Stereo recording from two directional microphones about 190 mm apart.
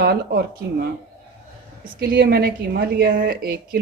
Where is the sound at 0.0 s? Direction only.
55° right (ahead or behind).